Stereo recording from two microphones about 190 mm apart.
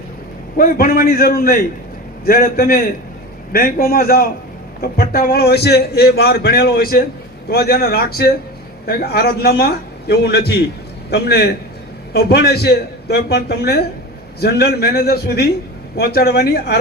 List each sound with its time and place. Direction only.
0.5 s a man's voice: 50° left (ahead or behind)